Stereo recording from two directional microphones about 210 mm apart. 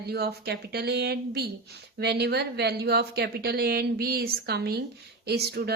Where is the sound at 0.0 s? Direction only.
50° right (ahead or behind).